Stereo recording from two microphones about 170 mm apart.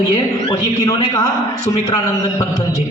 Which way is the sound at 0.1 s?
20° left (ahead or behind).